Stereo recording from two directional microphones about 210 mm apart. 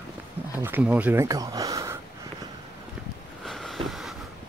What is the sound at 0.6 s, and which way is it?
Speech, 10° right (ahead or behind).